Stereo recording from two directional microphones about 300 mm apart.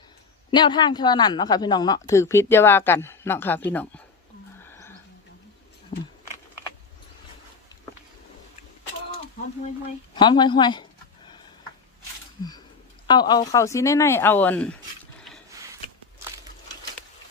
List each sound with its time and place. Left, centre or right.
0.5 s speech: centre
5.9 s speech: left
10.2 s speech: centre
13.1 s speech: centre